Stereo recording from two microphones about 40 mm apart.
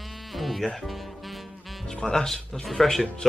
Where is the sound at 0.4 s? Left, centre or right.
Centre.